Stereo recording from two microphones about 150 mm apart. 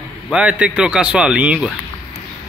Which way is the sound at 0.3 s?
10° right (ahead or behind).